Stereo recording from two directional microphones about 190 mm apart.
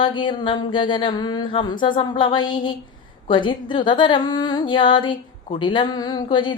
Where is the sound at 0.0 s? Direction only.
25° left (ahead or behind).